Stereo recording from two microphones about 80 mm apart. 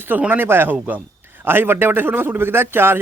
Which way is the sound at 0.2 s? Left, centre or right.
Right.